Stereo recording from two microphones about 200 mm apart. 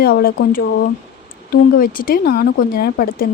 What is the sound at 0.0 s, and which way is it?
A woman's voice, 50° left (ahead or behind).